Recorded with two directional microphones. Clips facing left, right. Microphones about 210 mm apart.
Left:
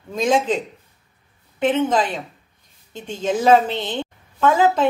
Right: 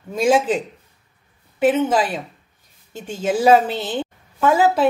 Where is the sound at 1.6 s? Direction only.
10° right (ahead or behind).